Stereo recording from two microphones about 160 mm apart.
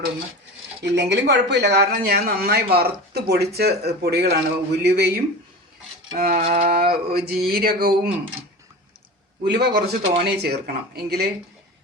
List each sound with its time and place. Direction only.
0.8 s speech: 90° right
6.1 s speech: 65° right (ahead or behind)
9.4 s speech: 90° right